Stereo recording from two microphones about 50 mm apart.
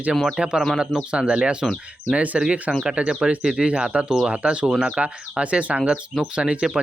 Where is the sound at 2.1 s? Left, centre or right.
Right.